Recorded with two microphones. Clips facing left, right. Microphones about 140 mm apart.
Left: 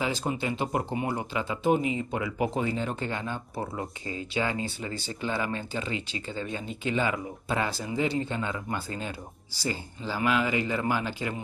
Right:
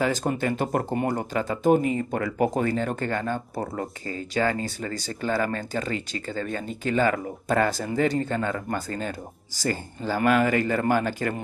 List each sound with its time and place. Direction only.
0.0 s speech: 50° right (ahead or behind)
4.4 s speech: 45° right (ahead or behind)